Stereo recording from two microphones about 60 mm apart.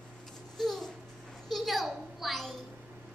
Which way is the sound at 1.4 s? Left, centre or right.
Centre.